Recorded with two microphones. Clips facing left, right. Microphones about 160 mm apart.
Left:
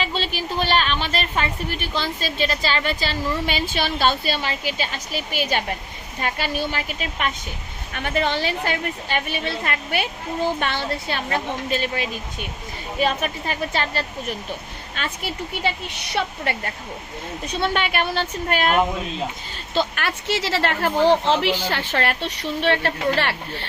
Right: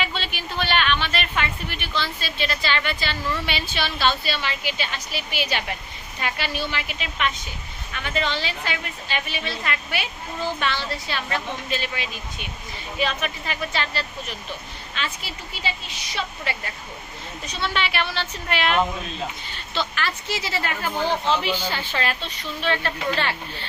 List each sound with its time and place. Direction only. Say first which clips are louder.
0.0 s a woman's voice: left 4 dB; 35° left (ahead or behind); by 23.6 s 65° left (ahead or behind)